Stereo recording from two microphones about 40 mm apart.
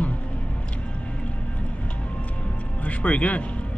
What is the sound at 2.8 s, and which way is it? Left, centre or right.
Speech, left.